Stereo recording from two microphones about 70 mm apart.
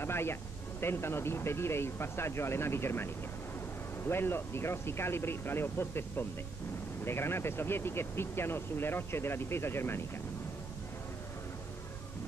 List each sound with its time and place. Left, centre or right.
0.0 s speech: left